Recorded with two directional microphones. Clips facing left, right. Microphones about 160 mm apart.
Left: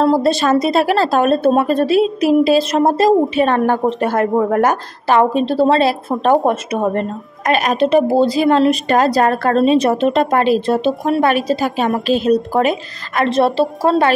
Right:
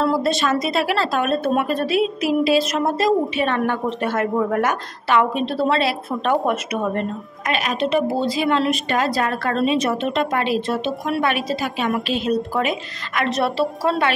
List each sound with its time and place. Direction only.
0.0 s speech: 35° left (ahead or behind)
6.4 s a woman's voice: 30° left (ahead or behind)
6.8 s speech: 40° left (ahead or behind)